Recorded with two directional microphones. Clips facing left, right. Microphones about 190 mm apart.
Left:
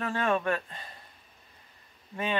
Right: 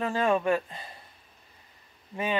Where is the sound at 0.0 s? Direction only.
15° right (ahead or behind).